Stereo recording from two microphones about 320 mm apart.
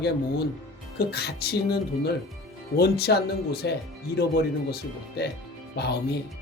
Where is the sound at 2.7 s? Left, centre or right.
Left.